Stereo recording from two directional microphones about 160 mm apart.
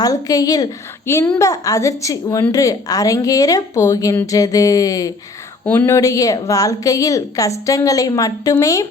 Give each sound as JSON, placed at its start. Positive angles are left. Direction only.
{"t": 0.0, "sound": "a woman's voice", "side_deg": 20}